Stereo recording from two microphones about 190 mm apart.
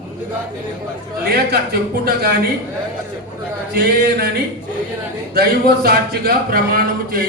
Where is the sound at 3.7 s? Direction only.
55° right (ahead or behind).